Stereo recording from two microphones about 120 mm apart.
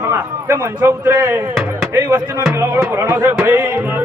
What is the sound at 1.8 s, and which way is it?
Speech, 20° right (ahead or behind).